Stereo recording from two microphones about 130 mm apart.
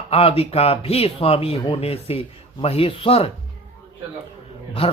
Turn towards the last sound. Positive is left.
turn(degrees=45)  # may be behind; listen again after turning